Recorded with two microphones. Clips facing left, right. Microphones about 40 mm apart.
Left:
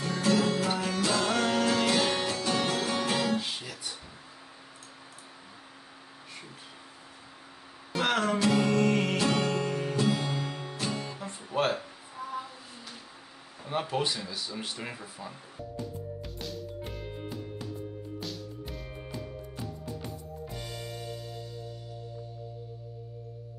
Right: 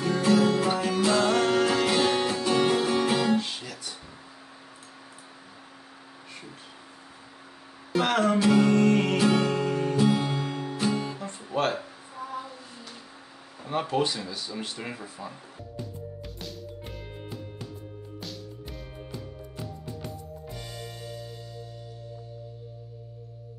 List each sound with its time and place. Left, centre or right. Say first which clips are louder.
0.0 s music: right 4 dB; centre
7.9 s music: right 4 dB; centre
13.6 s speech: right 4 dB; centre
16.3 s music: left 2 dB; centre